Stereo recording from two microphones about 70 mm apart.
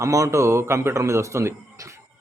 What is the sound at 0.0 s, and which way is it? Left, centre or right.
A man's voice, right.